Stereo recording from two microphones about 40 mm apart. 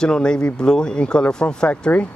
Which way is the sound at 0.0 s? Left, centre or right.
Centre.